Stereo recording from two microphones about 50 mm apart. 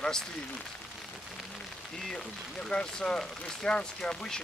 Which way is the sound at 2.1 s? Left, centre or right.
Centre.